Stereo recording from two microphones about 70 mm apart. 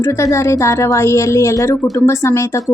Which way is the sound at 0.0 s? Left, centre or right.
Left.